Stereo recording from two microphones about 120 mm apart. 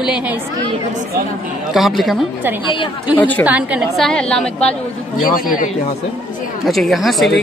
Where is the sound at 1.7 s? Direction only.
Centre (ahead or behind).